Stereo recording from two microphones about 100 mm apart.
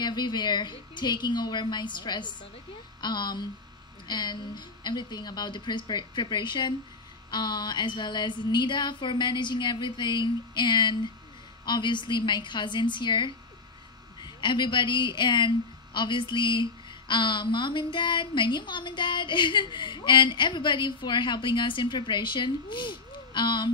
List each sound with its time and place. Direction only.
0.0 s a woman's voice: 45° left (ahead or behind)